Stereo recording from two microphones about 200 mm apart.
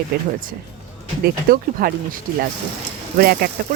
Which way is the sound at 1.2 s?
45° right (ahead or behind).